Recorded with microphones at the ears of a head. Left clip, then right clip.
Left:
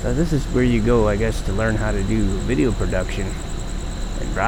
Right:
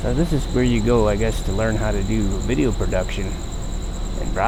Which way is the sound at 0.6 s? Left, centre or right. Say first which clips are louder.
Even; centre.